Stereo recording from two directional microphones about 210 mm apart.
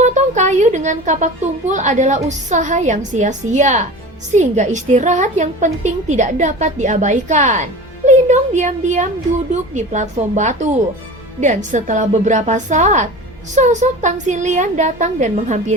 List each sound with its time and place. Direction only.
0.0 s a child's voice: 35° right (ahead or behind)